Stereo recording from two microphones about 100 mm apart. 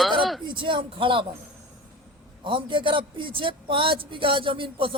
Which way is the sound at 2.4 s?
55° right (ahead or behind).